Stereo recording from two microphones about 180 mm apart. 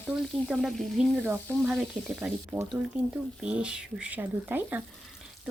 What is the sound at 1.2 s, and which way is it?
Frying, 10° right (ahead or behind).